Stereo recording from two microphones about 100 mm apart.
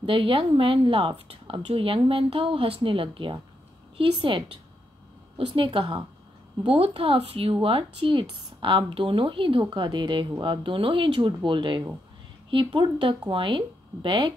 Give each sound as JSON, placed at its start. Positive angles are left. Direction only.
{"t": 0.0, "sound": "a woman's voice", "side_deg": -60}